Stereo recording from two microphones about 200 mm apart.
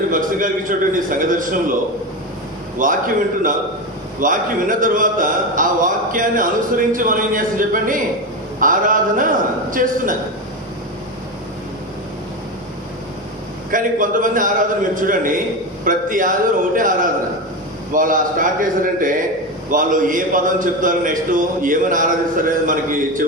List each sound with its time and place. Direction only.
0.1 s a man's voice: 40° right (ahead or behind)
2.7 s a man's voice: 40° right (ahead or behind)
13.7 s a man's voice: 40° right (ahead or behind)